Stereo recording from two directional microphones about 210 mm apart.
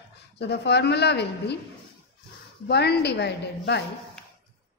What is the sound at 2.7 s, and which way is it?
A woman's voice, 50° left (ahead or behind).